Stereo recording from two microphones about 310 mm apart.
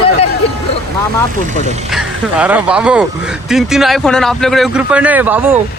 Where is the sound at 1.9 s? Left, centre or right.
Centre.